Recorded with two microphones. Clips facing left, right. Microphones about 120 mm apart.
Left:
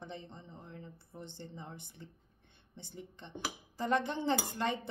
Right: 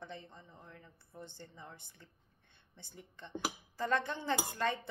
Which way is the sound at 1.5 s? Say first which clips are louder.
Left 5 dB; 20° left (ahead or behind).